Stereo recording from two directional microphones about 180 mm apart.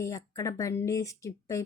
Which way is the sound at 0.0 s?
15° left (ahead or behind).